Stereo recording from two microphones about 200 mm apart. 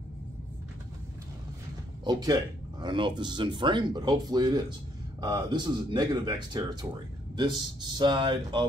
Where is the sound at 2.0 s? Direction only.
20° right (ahead or behind).